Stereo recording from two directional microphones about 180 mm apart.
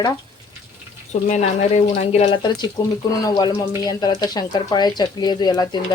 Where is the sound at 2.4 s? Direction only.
25° left (ahead or behind).